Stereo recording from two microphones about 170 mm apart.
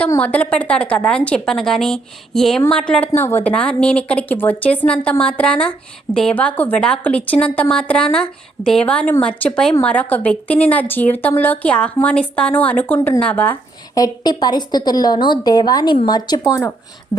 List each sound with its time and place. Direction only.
0.0 s a woman's voice: 10° left (ahead or behind)
13.9 s a woman's voice: 25° left (ahead or behind)
16.4 s a woman's voice: 15° left (ahead or behind)